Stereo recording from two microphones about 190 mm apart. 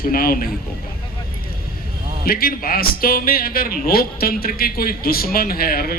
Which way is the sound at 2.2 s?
50° left (ahead or behind).